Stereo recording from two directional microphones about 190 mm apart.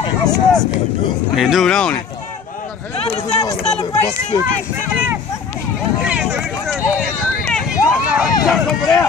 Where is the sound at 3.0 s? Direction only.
30° left (ahead or behind).